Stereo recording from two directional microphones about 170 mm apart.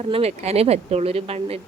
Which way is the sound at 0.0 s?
35° right (ahead or behind).